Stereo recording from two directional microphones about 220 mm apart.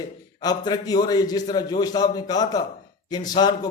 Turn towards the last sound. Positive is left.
turn(degrees=20)  # may be behind; listen again after turning